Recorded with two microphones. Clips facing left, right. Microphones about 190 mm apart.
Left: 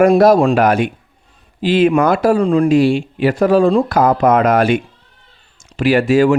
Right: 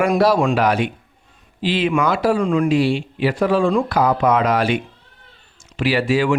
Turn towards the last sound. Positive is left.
turn(degrees=45)  # may be behind; listen again after turning